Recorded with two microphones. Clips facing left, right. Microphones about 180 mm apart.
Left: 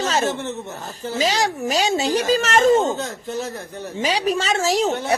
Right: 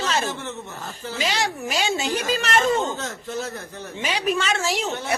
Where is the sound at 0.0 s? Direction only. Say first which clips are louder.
Left 4 dB; 40° left (ahead or behind).